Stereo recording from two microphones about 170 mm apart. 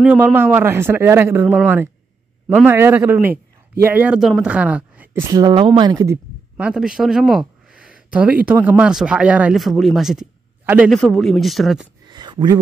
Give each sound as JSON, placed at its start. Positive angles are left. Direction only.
{"t": 0.0, "sound": "a woman's voice", "side_deg": -10}
{"t": 5.2, "sound": "speech", "side_deg": -20}
{"t": 6.5, "sound": "speech", "side_deg": -5}
{"t": 10.6, "sound": "a sound", "side_deg": -10}
{"t": 10.9, "sound": "speech", "side_deg": 0}
{"t": 12.1, "sound": "a sound", "side_deg": -25}